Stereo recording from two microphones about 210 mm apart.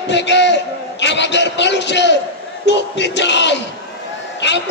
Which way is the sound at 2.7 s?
55° left (ahead or behind).